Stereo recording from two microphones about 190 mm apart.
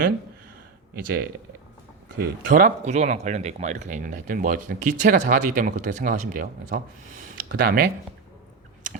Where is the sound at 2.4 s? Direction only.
45° right (ahead or behind).